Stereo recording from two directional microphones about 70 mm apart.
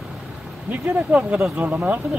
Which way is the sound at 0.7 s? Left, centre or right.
Right.